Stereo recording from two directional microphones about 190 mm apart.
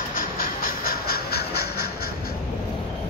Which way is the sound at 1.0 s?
55° left (ahead or behind).